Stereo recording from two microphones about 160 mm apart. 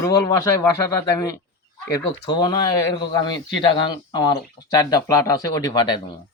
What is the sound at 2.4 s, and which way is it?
Speech, 25° left (ahead or behind).